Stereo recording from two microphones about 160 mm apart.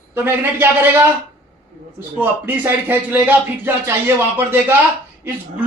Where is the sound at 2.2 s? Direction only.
10° right (ahead or behind).